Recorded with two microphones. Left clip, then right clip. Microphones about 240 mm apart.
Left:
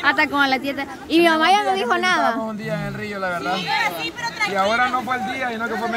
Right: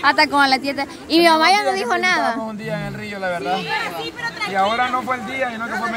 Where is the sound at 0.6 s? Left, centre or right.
Centre.